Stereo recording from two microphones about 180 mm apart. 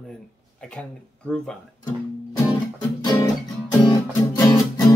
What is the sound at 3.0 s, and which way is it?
Music, 25° left (ahead or behind).